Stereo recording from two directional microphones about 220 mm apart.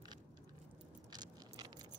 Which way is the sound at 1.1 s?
20° right (ahead or behind).